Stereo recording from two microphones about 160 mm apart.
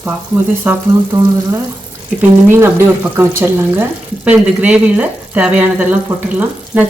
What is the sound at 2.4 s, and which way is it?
Speech, 15° right (ahead or behind).